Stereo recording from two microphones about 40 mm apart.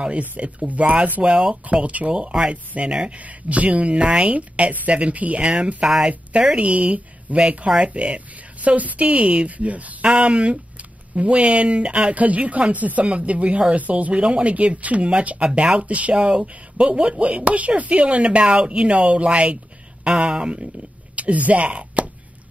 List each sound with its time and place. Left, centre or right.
0.4 s a woman's voice: right
1.2 s speech: right
1.7 s a woman's voice: right
2.9 s speech: right
3.2 s a woman's voice: right
5.4 s a woman's voice: right
7.3 s a woman's voice: right
13.0 s a woman's voice: right
14.1 s a woman's voice: right
16.2 s a woman's voice: right
21.2 s speech: right